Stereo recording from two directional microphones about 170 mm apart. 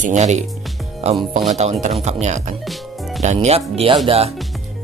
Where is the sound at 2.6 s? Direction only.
Centre (ahead or behind).